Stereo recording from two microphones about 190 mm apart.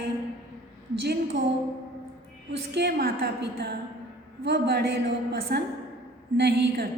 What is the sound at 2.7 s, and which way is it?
A woman's voice, 60° right (ahead or behind).